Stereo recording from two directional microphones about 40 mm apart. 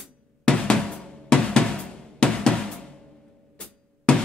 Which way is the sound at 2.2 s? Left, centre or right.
Left.